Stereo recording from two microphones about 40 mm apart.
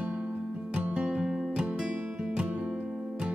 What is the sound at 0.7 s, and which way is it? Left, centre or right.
Music, right.